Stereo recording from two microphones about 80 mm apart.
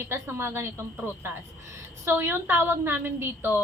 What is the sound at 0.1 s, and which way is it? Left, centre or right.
A woman's voice, right.